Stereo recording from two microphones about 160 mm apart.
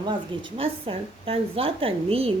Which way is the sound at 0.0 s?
30° right (ahead or behind).